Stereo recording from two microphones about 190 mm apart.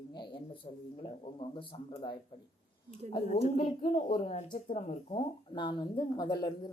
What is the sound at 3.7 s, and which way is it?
Speech, 35° left (ahead or behind).